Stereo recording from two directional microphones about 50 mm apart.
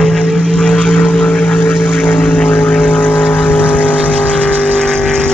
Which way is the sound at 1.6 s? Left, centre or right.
Left.